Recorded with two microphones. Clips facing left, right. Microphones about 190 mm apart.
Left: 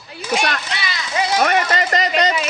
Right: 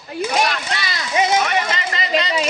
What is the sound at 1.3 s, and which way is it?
Speech, 45° left (ahead or behind).